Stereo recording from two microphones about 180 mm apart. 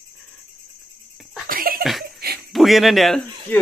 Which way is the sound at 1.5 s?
50° right (ahead or behind).